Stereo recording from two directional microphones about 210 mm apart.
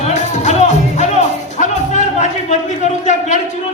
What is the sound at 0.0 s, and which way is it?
Music, 30° left (ahead or behind).